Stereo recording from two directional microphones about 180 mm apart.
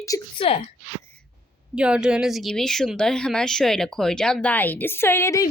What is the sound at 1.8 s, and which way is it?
Speech, 5° right (ahead or behind).